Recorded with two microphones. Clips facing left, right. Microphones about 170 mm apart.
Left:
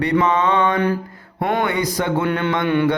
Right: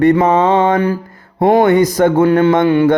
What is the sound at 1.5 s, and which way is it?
A man's voice, 45° right (ahead or behind).